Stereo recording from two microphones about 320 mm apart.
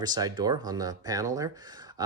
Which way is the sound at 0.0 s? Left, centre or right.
Centre.